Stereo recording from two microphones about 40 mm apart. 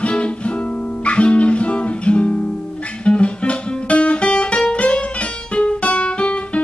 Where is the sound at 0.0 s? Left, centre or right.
Left.